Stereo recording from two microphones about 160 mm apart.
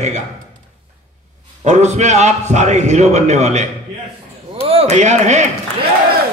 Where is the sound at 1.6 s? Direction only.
45° right (ahead or behind).